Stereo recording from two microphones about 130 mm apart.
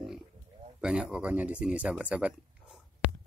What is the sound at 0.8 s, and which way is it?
Speech, 5° right (ahead or behind).